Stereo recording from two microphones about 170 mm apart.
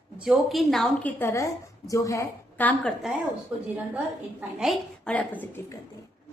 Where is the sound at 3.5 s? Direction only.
5° right (ahead or behind); by 5.8 s 10° left (ahead or behind).